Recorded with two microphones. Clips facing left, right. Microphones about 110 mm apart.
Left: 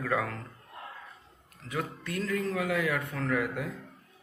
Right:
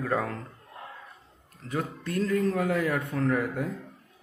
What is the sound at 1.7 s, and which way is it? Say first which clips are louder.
Speech: right 3 dB; 40° right (ahead or behind).